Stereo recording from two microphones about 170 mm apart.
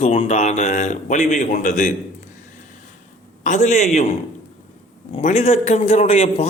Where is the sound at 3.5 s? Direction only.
45° left (ahead or behind).